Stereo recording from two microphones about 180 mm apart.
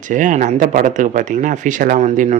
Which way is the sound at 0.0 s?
45° right (ahead or behind).